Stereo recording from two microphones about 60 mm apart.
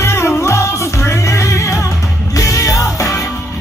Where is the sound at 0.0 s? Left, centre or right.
Left.